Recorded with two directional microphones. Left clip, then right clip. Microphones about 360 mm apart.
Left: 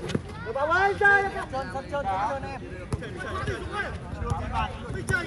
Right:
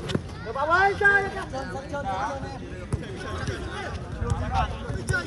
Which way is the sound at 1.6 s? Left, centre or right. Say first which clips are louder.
Left 2 dB; left.